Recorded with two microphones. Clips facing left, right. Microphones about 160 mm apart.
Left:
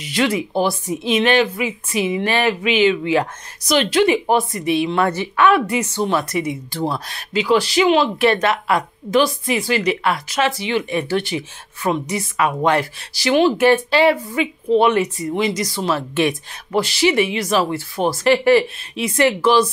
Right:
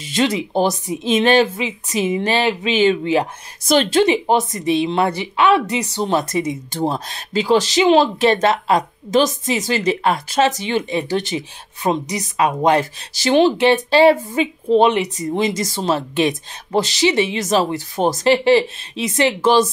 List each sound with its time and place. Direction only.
0.0 s speech: 20° right (ahead or behind)
1.6 s speech: 25° right (ahead or behind)
2.6 s speech: 30° right (ahead or behind)